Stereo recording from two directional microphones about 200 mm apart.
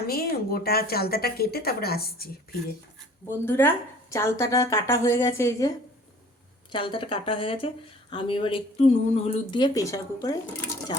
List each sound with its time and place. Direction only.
0.1 s a woman's voice: 50° left (ahead or behind)
3.4 s a woman's voice: 10° left (ahead or behind)
6.7 s speech: 25° left (ahead or behind)
9.6 s a woman's voice: 20° left (ahead or behind)